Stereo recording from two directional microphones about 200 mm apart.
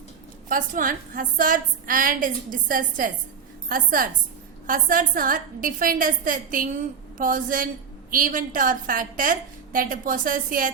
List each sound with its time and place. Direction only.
0.4 s a woman's voice: 40° right (ahead or behind)